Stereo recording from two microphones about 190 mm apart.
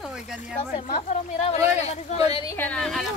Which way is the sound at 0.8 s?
35° left (ahead or behind).